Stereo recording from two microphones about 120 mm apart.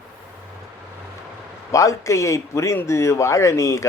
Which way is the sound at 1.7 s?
25° left (ahead or behind).